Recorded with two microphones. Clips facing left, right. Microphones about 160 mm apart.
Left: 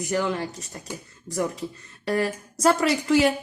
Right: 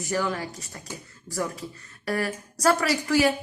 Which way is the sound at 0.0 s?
20° left (ahead or behind).